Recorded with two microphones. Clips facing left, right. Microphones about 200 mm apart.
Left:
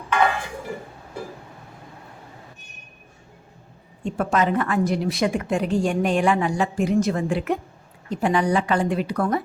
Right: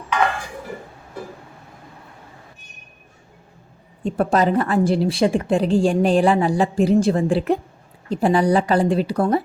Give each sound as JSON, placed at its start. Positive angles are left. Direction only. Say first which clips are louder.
{"t": 4.0, "sound": "a woman's voice", "louder": "right 4 dB", "side_deg": -35}